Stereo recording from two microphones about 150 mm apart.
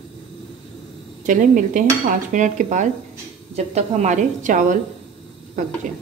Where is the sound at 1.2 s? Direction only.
60° right (ahead or behind).